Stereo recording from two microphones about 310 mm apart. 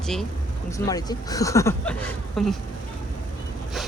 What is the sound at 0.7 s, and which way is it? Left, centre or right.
Speech, centre.